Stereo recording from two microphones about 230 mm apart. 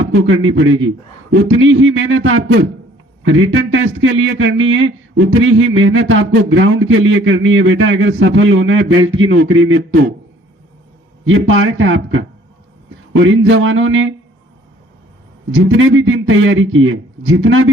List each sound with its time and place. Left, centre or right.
0.1 s speech: right
11.3 s speech: right
15.5 s speech: right